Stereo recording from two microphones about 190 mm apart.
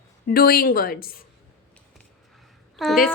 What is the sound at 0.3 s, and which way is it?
Speech, 55° left (ahead or behind).